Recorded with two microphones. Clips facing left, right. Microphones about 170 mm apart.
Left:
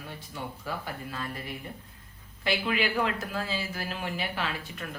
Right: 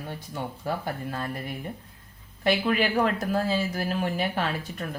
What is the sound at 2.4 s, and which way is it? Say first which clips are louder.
Speech: right 5 dB; 45° right (ahead or behind).